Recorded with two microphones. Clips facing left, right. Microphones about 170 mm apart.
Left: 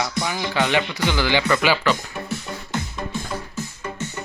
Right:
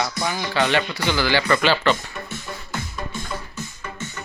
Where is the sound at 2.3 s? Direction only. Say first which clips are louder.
Left 6 dB; 25° left (ahead or behind).